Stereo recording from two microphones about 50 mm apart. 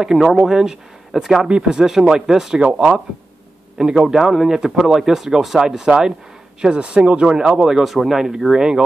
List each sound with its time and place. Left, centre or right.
0.0 s speech: centre
3.8 s speech: centre
4.1 s speech: centre